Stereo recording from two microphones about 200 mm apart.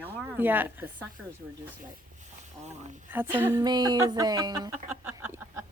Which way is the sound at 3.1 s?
10° right (ahead or behind).